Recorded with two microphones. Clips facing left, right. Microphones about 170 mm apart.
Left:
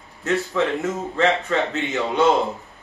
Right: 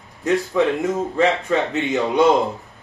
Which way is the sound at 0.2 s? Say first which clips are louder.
Right 3 dB; 15° right (ahead or behind).